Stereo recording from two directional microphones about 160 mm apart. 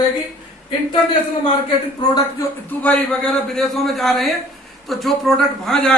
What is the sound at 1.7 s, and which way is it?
Speech, 25° left (ahead or behind).